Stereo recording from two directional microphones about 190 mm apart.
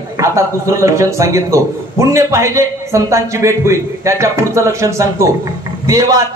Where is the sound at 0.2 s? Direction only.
15° right (ahead or behind).